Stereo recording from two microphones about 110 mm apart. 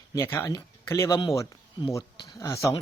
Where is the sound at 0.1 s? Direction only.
20° left (ahead or behind).